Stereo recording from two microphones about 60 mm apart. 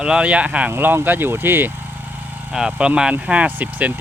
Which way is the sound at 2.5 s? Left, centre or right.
Centre.